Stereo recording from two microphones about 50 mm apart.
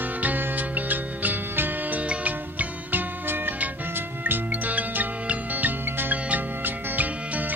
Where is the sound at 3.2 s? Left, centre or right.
Right.